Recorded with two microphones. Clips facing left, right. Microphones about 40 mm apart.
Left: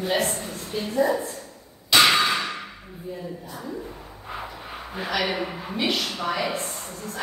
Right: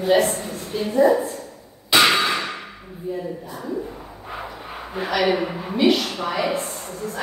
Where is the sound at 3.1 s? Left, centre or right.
Centre.